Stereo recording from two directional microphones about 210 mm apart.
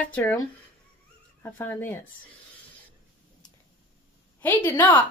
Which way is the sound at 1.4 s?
10° left (ahead or behind).